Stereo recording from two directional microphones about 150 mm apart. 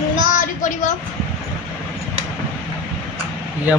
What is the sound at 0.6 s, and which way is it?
Speech, 55° left (ahead or behind).